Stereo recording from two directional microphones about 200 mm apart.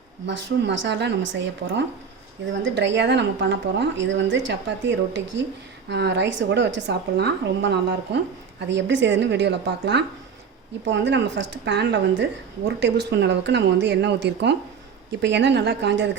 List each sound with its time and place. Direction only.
0.3 s a woman's voice: 60° right (ahead or behind)